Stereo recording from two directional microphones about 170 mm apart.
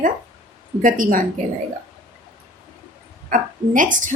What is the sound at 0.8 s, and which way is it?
Speech, 50° right (ahead or behind).